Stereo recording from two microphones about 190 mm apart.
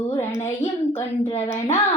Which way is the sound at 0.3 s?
15° left (ahead or behind).